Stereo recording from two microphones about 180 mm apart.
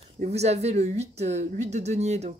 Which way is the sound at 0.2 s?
35° right (ahead or behind).